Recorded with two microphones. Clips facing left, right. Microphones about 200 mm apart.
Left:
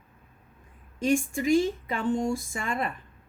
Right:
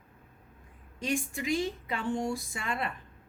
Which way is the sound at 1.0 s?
50° left (ahead or behind).